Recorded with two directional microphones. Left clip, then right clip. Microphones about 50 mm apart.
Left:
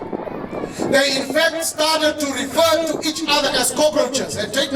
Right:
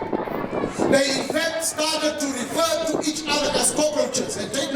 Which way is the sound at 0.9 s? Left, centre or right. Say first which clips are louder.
Left 6 dB; left.